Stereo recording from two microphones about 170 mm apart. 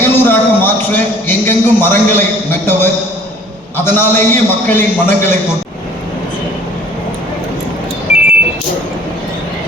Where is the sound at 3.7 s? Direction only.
10° left (ahead or behind).